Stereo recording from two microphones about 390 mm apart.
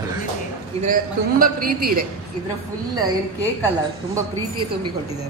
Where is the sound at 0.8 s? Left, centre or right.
Right.